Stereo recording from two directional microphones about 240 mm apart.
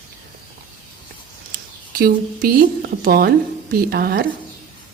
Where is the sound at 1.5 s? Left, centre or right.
Right.